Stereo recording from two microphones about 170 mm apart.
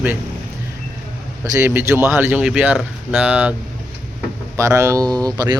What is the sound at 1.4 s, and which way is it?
Speech, 15° right (ahead or behind).